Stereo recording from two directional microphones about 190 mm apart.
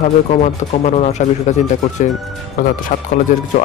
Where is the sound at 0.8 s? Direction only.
35° left (ahead or behind).